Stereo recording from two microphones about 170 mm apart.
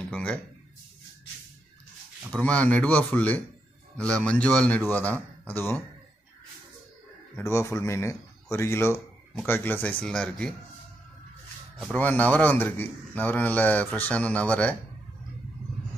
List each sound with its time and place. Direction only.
0.1 s speech: 5° left (ahead or behind)
2.3 s a man's voice: 5° left (ahead or behind)
7.3 s a man's voice: 15° left (ahead or behind)
11.9 s a man's voice: 10° left (ahead or behind)